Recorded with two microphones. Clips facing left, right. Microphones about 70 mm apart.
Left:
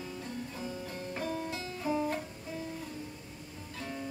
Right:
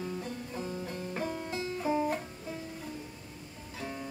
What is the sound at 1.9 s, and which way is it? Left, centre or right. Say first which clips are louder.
Music: right 2 dB; centre.